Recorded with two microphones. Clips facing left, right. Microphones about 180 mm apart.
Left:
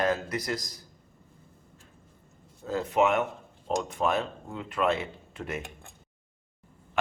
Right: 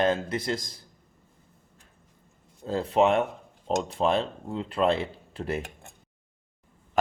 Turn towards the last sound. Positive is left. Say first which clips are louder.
# right 4 dB
turn(degrees=-30)  # may be behind; listen again after turning